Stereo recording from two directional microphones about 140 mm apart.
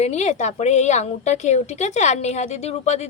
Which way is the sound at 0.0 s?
55° left (ahead or behind).